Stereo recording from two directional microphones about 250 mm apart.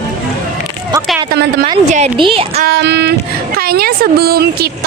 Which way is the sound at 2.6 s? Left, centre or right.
Right.